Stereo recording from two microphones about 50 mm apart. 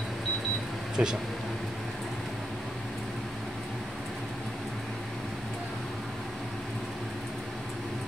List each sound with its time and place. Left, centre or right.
1.0 s speech: centre